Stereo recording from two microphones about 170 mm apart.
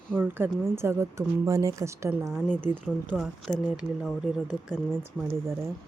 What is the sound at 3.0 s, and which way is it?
Speech, centre (ahead or behind).